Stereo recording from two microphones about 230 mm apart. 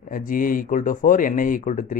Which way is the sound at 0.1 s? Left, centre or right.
Left.